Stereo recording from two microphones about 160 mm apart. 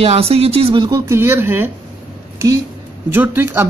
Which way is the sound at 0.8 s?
20° right (ahead or behind).